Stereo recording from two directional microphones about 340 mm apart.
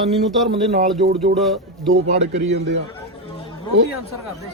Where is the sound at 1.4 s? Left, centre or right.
Centre.